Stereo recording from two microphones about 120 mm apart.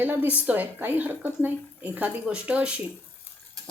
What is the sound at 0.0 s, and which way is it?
Speech, 15° right (ahead or behind).